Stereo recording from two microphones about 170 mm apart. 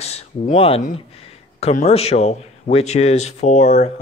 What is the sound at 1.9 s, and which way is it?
Speech, 35° left (ahead or behind).